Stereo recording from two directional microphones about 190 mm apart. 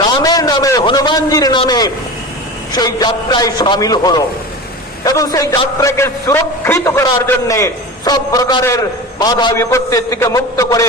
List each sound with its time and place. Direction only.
0.2 s a man's voice: 20° left (ahead or behind)